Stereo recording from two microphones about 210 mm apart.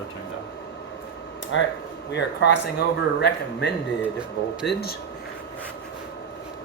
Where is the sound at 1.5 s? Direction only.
60° left (ahead or behind).